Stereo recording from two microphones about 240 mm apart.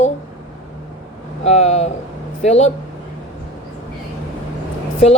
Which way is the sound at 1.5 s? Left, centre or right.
Left.